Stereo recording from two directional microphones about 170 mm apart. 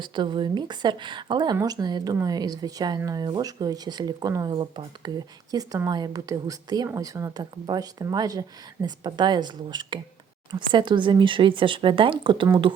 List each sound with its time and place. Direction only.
0.0 s speech: 25° right (ahead or behind)